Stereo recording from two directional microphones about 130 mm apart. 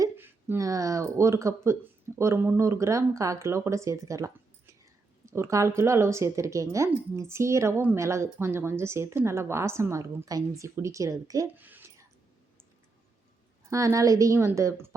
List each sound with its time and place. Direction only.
0.0 s speech: 15° right (ahead or behind)
11.5 s whispering: 15° right (ahead or behind)
13.7 s speech: 25° right (ahead or behind)